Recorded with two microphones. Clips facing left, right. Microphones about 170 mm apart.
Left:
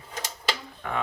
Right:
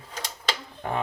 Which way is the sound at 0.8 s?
35° right (ahead or behind).